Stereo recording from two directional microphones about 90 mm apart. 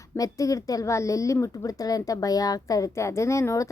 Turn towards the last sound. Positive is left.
turn(degrees=35)  # may be behind; listen again after turning